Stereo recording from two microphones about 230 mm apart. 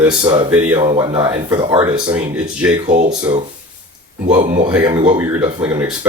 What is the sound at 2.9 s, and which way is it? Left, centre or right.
Speech, right.